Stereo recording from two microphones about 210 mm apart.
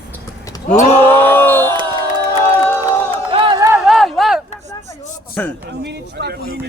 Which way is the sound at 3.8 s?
Centre (ahead or behind).